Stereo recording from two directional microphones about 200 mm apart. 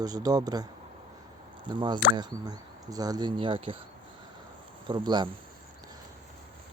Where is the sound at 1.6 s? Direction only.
25° right (ahead or behind).